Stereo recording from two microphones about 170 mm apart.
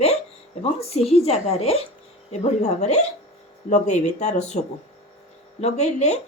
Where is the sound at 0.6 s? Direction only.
35° left (ahead or behind).